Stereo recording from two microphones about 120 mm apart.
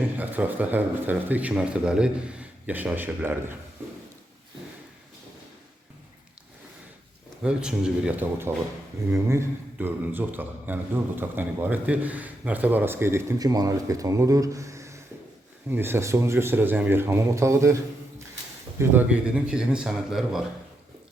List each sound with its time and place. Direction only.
0.2 s a man's voice: 15° right (ahead or behind)
7.4 s a man's voice: 5° right (ahead or behind)
13.4 s speech: 30° right (ahead or behind)
18.8 s a man's voice: 15° right (ahead or behind)